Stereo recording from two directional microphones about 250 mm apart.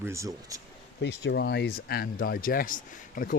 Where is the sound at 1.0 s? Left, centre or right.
Left.